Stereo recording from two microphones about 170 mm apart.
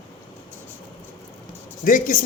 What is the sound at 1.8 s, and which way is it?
Speech, 55° left (ahead or behind).